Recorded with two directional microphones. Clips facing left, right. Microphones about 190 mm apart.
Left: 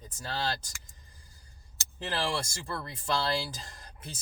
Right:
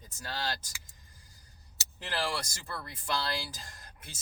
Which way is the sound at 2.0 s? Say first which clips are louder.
Left 2 dB; 25° left (ahead or behind).